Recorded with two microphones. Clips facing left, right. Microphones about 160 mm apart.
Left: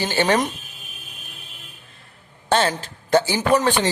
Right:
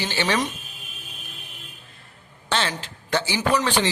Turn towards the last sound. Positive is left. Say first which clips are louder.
# left 3 dB
turn(degrees=50)  # may be behind; listen again after turning